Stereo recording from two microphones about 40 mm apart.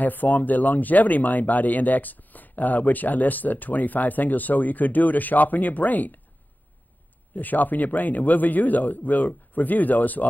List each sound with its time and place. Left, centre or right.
0.0 s speech: left
7.3 s speech: left